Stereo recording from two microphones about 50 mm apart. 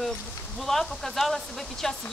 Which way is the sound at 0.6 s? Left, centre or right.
Centre.